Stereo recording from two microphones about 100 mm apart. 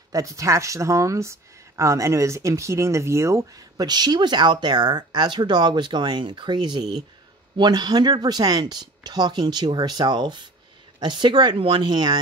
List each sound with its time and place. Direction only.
0.1 s speech: 35° right (ahead or behind)